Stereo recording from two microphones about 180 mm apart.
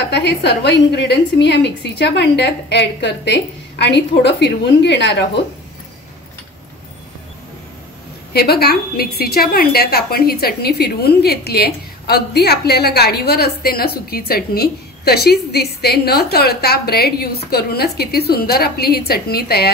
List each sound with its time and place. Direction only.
0.1 s a woman's voice: 70° left (ahead or behind)
8.3 s a woman's voice: 60° left (ahead or behind)